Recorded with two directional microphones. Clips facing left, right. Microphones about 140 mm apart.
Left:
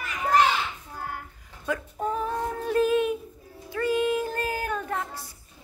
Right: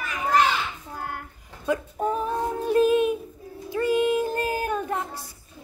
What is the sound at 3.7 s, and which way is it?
Child singing, 15° right (ahead or behind).